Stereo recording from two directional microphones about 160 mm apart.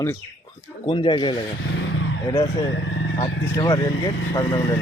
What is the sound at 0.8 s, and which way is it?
Speech, 30° left (ahead or behind).